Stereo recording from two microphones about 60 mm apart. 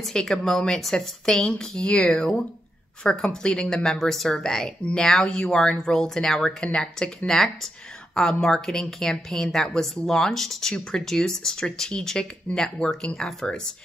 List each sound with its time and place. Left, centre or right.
0.1 s a woman's voice: centre